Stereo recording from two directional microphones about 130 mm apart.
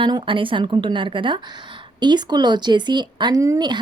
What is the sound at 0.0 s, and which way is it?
Speech, 40° right (ahead or behind).